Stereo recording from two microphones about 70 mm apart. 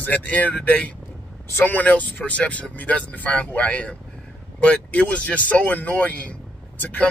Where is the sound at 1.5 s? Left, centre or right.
Left.